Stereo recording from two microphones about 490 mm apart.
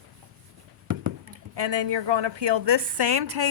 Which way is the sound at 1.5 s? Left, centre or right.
Right.